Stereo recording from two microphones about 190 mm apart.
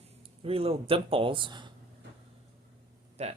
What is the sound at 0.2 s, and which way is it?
Speech, 30° right (ahead or behind).